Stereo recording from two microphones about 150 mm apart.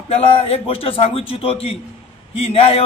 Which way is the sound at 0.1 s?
40° left (ahead or behind).